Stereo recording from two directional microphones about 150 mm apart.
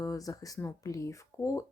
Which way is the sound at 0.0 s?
20° left (ahead or behind).